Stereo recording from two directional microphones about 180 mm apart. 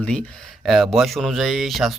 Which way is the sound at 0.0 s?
5° left (ahead or behind).